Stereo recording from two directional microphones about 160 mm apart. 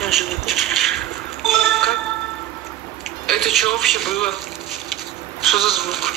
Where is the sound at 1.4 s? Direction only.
Centre (ahead or behind).